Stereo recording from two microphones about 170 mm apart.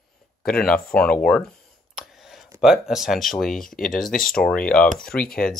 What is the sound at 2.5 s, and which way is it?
Speech, centre (ahead or behind).